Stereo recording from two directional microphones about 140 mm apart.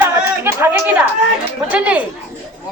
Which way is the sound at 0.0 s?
15° right (ahead or behind).